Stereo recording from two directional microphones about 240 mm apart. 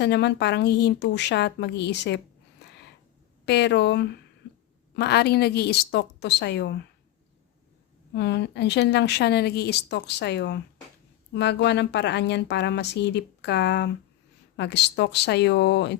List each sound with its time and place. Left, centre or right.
0.0 s speech: left
3.4 s speech: left
8.1 s speech: left